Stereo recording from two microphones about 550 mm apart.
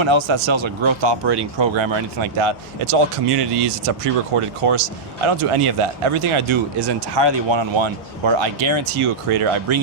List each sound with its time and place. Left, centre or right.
0.0 s speech: right